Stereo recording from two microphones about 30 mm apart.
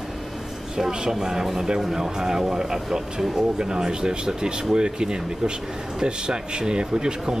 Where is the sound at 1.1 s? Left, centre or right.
Centre.